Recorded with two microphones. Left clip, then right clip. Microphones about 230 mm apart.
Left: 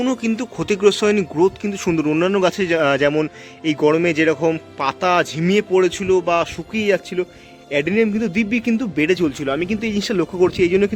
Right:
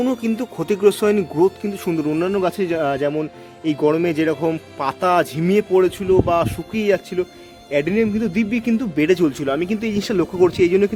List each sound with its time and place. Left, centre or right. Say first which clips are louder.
0.0 s speech: even; centre